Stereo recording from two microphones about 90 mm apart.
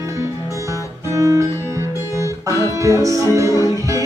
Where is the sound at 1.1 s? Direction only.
35° right (ahead or behind).